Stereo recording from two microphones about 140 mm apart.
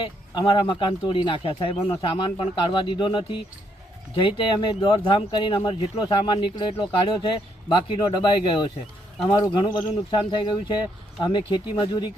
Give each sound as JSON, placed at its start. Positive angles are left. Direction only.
{"t": 0.0, "sound": "speech", "side_deg": 35}